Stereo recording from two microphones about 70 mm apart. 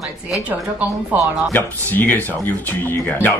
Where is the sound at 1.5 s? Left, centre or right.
Left.